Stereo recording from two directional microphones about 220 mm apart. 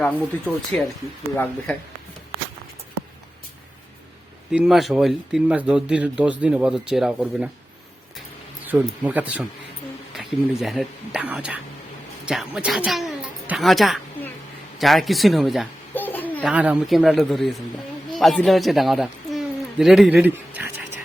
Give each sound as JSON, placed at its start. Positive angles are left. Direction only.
{"t": 0.0, "sound": "speech", "side_deg": 5}
{"t": 4.5, "sound": "speech", "side_deg": 0}
{"t": 8.6, "sound": "a child's voice", "side_deg": -10}
{"t": 14.8, "sound": "a sound", "side_deg": 0}
{"t": 16.4, "sound": "a man's voice", "side_deg": -5}